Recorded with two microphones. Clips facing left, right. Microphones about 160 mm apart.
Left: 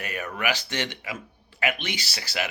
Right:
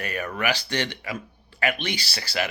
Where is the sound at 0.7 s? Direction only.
20° left (ahead or behind).